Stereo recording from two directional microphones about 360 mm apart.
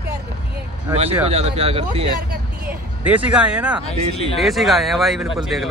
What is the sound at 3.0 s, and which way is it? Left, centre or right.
Speech, centre.